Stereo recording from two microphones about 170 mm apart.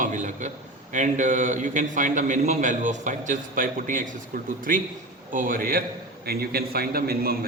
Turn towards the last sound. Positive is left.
turn(degrees=-60)  # may be behind; listen again after turning